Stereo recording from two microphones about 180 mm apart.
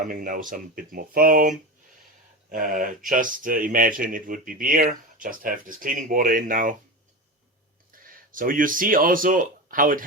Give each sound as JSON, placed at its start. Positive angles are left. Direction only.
{"t": 0.0, "sound": "speech", "side_deg": -50}
{"t": 8.1, "sound": "speech", "side_deg": -50}